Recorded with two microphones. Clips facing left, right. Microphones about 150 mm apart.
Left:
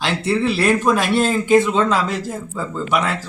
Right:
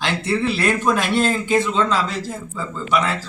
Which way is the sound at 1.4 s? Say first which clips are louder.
Left 4 dB; 45° left (ahead or behind).